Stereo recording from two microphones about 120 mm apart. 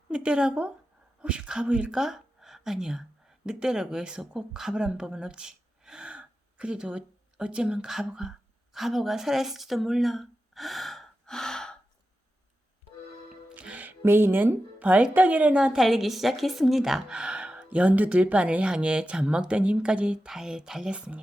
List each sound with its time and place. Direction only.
0.1 s a woman's voice: 10° right (ahead or behind)
13.5 s speech: 10° right (ahead or behind)